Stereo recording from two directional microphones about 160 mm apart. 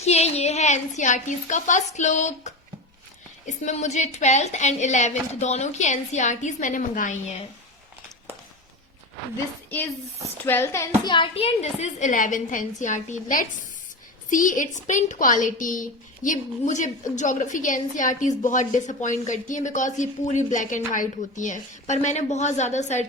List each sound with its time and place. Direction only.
0.0 s a woman's voice: 40° left (ahead or behind)
9.6 s a woman's voice: 10° left (ahead or behind)
11.0 s a woman's voice: 30° left (ahead or behind); by 23.0 s 45° left (ahead or behind)